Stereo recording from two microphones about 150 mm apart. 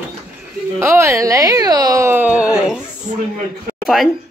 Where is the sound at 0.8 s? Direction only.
20° right (ahead or behind).